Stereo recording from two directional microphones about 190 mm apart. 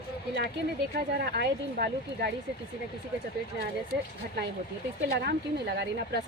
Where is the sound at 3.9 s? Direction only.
60° right (ahead or behind).